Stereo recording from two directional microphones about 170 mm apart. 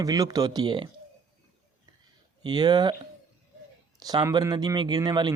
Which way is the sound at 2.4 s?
25° right (ahead or behind).